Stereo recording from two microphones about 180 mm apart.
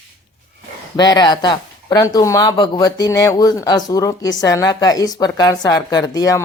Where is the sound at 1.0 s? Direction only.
25° left (ahead or behind).